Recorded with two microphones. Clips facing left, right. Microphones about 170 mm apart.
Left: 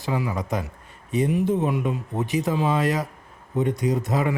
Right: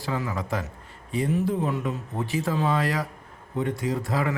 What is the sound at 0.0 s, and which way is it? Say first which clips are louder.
A man's voice: left 3 dB; 15° left (ahead or behind).